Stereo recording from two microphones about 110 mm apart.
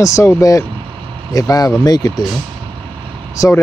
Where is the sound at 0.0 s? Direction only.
30° left (ahead or behind).